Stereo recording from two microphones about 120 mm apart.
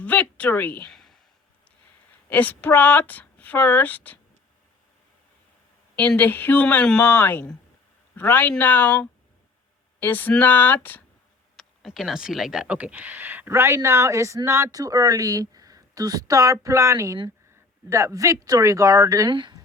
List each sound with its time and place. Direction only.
0.0 s a sound: 10° left (ahead or behind)
2.3 s speech: 15° left (ahead or behind)
6.0 s speech: 15° left (ahead or behind)
11.5 s speech: centre (ahead or behind); by 19.3 s 25° right (ahead or behind)
19.3 s a woman's voice: 40° right (ahead or behind)